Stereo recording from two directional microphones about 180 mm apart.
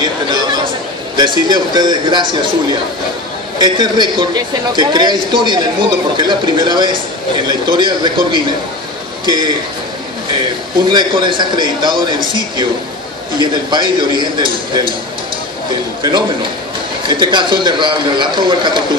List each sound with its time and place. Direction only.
1.1 s a man's voice: 25° right (ahead or behind)
10.9 s a man's voice: 25° right (ahead or behind)
13.4 s a man's voice: 25° right (ahead or behind)
16.0 s a man's voice: 25° right (ahead or behind)